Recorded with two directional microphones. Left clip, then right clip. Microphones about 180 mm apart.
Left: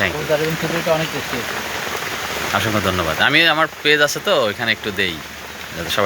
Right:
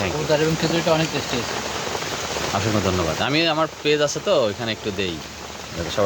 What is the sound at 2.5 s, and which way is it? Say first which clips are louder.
Speech: left 4 dB; centre (ahead or behind).